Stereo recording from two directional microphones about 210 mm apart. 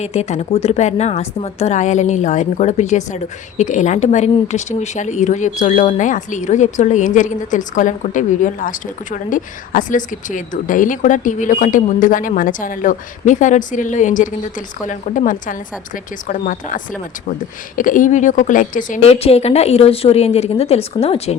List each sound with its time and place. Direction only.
0.0 s speech: 30° left (ahead or behind)